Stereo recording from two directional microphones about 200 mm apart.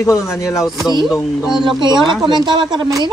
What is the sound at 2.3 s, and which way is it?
Speech, 20° right (ahead or behind).